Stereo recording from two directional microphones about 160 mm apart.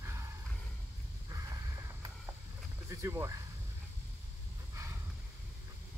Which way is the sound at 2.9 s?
15° right (ahead or behind).